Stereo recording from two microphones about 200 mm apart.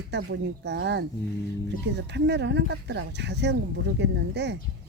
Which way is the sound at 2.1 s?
60° right (ahead or behind).